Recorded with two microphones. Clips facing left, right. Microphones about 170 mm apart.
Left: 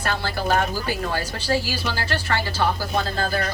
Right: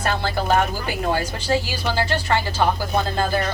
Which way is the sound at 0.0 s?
20° right (ahead or behind).